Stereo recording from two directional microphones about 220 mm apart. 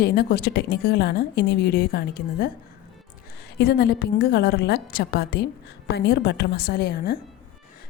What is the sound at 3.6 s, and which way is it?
A woman's voice, 45° left (ahead or behind).